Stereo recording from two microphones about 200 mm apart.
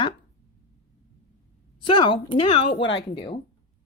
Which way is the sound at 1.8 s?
25° left (ahead or behind).